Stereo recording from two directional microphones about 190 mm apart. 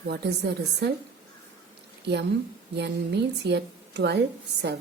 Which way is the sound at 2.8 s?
60° right (ahead or behind).